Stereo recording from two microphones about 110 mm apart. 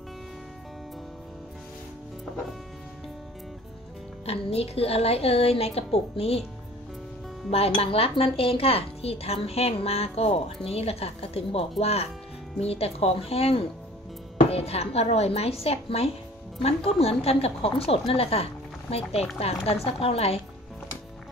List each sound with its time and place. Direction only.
4.3 s speech: 65° left (ahead or behind)
7.5 s speech: 65° left (ahead or behind)